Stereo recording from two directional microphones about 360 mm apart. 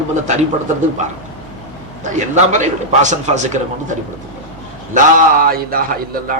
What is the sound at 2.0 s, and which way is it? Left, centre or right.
A man's voice, centre.